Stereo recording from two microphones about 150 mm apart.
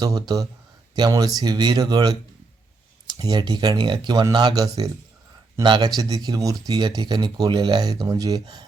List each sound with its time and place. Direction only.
0.0 s speech: 25° right (ahead or behind)